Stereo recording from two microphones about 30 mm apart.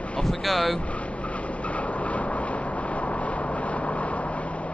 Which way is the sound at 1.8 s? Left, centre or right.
Left.